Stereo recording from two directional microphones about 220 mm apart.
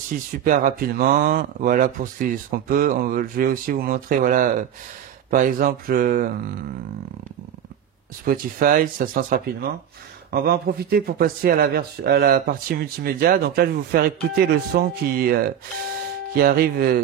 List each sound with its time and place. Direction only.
0.4 s speech: 40° right (ahead or behind)
8.3 s speech: 40° right (ahead or behind)